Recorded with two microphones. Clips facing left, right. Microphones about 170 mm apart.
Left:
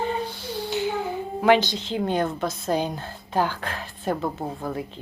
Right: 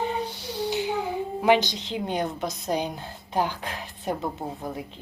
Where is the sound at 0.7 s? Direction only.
15° right (ahead or behind).